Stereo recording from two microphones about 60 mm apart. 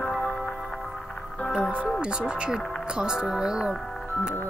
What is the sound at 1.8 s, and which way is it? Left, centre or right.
Speech, centre.